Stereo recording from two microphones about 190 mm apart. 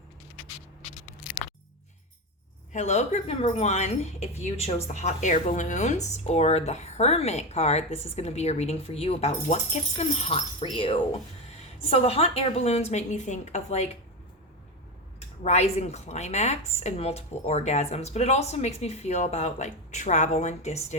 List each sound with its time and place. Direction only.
2.7 s speech: 35° left (ahead or behind)
15.4 s speech: 35° left (ahead or behind)